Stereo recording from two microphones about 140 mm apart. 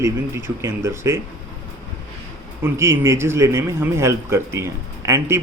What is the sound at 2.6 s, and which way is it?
A man's voice, 20° right (ahead or behind).